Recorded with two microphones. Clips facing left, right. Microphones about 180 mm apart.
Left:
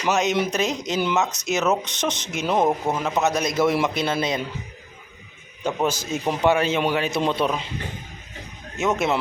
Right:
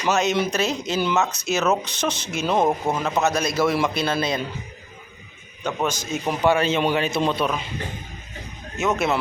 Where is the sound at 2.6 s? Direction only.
5° left (ahead or behind).